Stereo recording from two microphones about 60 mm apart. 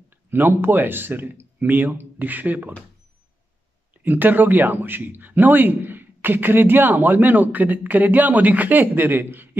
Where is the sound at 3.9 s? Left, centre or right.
Right.